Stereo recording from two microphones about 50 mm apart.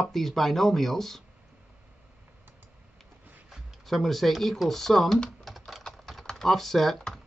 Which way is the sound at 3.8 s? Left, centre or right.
Centre.